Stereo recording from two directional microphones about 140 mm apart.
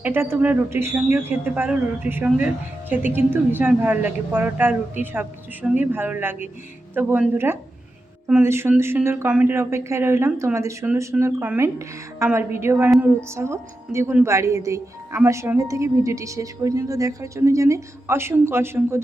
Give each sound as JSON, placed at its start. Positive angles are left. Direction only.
{"t": 0.0, "sound": "speech", "side_deg": -15}